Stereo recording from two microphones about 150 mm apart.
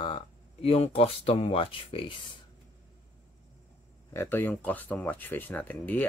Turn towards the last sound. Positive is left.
turn(degrees=10)  # may be behind; listen again after turning